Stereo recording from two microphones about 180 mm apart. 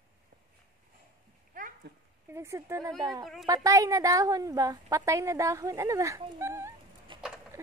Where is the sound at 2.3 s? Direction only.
15° right (ahead or behind).